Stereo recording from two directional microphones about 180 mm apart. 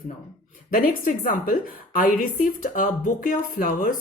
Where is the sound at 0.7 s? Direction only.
50° left (ahead or behind).